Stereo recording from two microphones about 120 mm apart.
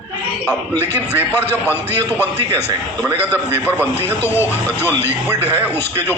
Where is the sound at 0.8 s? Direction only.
20° left (ahead or behind).